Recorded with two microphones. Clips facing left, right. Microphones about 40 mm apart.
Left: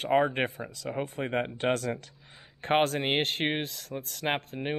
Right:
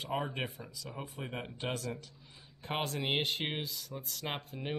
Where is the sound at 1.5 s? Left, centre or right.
Left.